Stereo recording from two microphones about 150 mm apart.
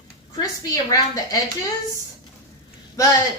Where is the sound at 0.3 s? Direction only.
25° left (ahead or behind).